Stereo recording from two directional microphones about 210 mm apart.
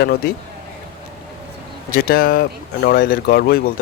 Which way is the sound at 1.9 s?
45° left (ahead or behind).